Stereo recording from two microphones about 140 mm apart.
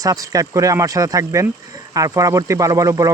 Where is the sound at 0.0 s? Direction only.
25° right (ahead or behind).